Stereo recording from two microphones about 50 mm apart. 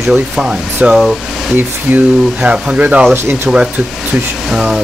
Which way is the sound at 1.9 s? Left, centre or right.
Right.